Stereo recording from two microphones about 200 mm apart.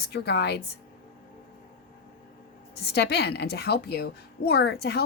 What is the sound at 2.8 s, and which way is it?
A woman's voice, 55° left (ahead or behind).